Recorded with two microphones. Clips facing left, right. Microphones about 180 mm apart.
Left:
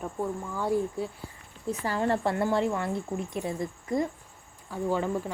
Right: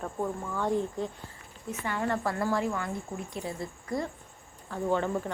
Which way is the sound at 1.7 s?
30° left (ahead or behind).